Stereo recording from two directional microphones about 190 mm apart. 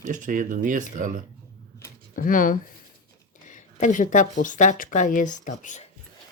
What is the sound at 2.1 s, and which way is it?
Speech, 45° left (ahead or behind).